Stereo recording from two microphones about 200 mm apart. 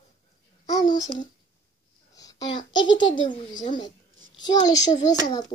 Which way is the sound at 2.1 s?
15° left (ahead or behind).